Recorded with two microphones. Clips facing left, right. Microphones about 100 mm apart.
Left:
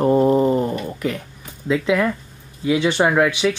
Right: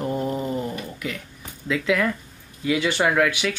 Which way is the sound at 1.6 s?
25° left (ahead or behind).